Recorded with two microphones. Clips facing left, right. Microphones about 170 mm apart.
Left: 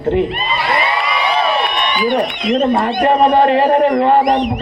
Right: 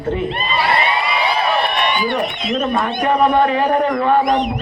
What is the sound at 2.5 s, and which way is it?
A man's voice, 30° left (ahead or behind).